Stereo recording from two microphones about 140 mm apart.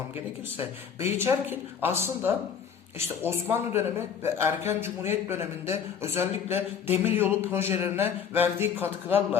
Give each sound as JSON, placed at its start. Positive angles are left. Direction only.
{"t": 0.5, "sound": "speech", "side_deg": -15}